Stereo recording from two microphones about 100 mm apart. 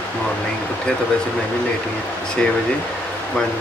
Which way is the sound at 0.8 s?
10° left (ahead or behind).